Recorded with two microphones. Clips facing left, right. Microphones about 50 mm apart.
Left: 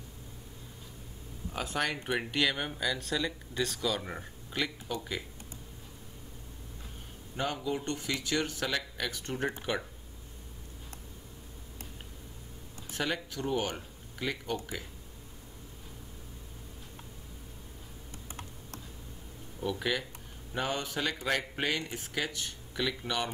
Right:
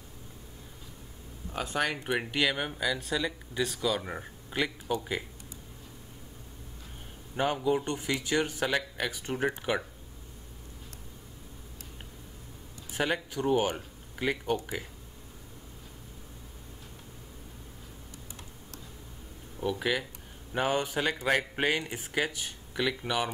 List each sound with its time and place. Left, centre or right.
1.5 s speech: centre
7.3 s speech: centre
12.9 s speech: centre
19.6 s speech: centre